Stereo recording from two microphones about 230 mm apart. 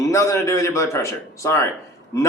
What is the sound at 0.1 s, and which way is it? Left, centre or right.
A man's voice, centre.